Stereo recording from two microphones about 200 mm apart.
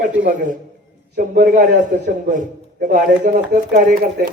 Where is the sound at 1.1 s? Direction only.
45° right (ahead or behind).